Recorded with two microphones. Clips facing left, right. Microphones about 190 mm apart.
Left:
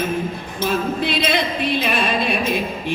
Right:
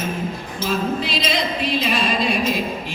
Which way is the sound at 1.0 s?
60° left (ahead or behind).